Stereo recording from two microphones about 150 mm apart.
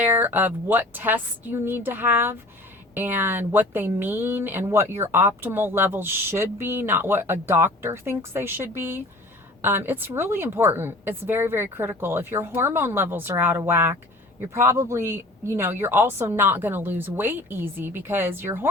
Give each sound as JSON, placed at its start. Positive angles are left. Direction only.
{"t": 0.0, "sound": "speech", "side_deg": -10}